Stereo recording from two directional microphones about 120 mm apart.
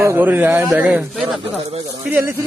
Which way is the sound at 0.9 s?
10° right (ahead or behind).